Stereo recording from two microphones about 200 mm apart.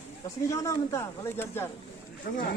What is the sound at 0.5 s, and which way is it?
Speech, 15° left (ahead or behind).